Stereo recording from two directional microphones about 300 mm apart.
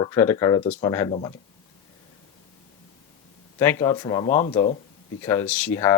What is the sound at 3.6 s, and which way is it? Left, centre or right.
Speech, centre.